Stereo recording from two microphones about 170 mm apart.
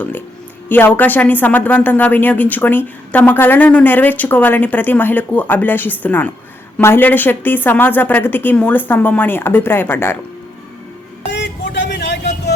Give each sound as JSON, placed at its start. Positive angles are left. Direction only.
{"t": 0.7, "sound": "speech", "side_deg": 10}
{"t": 11.3, "sound": "vehicle", "side_deg": 90}